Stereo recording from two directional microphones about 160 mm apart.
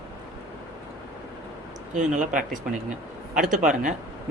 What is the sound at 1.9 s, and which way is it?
Speech, 50° right (ahead or behind).